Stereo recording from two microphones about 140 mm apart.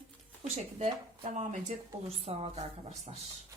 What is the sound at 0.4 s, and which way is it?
A woman's voice, 50° right (ahead or behind).